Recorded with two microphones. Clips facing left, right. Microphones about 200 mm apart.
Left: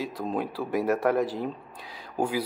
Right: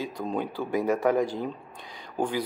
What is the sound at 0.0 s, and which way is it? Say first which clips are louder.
Speech: even; centre (ahead or behind).